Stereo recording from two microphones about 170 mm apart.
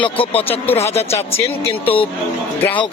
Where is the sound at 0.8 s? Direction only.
40° left (ahead or behind).